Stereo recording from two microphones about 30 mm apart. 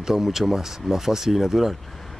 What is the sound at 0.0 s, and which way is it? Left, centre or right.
Speech, centre.